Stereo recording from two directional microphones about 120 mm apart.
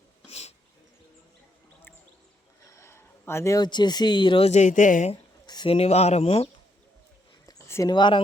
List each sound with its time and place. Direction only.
0.3 s a sound: 60° left (ahead or behind)
2.6 s speech: 25° left (ahead or behind); by 4.4 s 40° left (ahead or behind)
4.4 s speech: 80° left
5.6 s speech: 55° left (ahead or behind)
7.4 s a sound: 30° left (ahead or behind)
7.9 s speech: 40° left (ahead or behind)